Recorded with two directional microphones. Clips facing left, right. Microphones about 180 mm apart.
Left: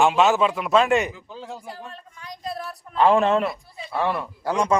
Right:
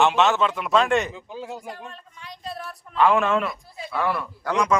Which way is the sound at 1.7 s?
40° left (ahead or behind).